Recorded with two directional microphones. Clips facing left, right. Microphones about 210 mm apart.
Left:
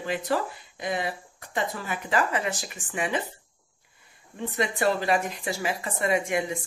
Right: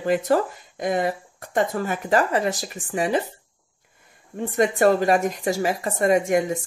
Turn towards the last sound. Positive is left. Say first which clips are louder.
# right 7 dB
turn(degrees=-40)  # may be behind; listen again after turning